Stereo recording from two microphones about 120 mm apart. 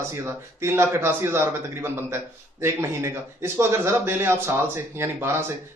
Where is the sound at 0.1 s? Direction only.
25° right (ahead or behind).